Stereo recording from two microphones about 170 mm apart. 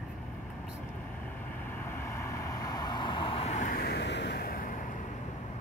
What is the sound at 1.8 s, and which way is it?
Vehicle, 15° left (ahead or behind).